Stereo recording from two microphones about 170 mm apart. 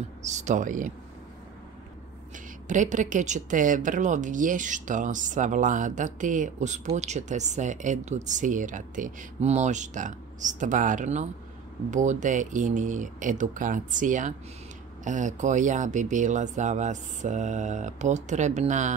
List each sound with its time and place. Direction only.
0.2 s speech: 45° right (ahead or behind)
2.7 s speech: 45° right (ahead or behind)